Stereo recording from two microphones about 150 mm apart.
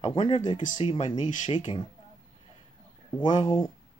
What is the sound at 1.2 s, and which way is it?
Speech, 55° left (ahead or behind).